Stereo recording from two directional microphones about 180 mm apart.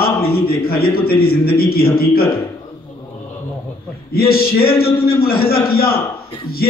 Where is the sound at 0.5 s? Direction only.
60° left (ahead or behind).